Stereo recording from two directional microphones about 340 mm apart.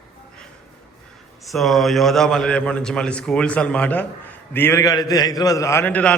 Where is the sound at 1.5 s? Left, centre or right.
Centre.